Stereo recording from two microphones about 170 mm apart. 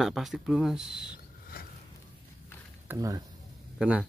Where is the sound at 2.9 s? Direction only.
20° right (ahead or behind).